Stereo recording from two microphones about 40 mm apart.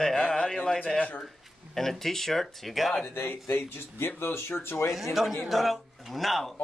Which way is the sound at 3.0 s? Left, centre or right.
Left.